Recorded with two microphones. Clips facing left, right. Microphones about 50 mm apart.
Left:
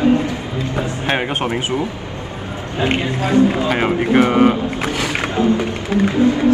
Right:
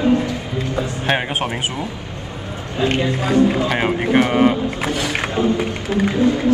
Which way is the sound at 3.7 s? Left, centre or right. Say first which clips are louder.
Left 2 dB; centre.